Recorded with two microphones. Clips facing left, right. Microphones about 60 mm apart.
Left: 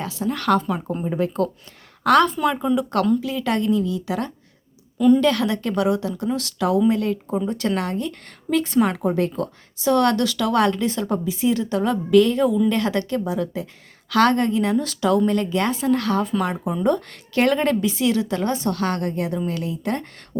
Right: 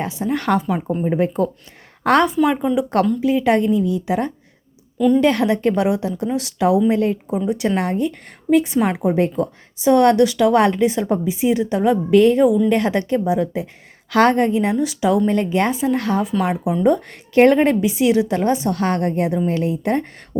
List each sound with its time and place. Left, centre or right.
0.0 s speech: right
0.6 s a woman's voice: centre
1.0 s speech: right
2.2 s a woman's voice: centre
4.9 s a woman's voice: centre
5.2 s speech: right
7.3 s a woman's voice: centre
15.3 s speech: right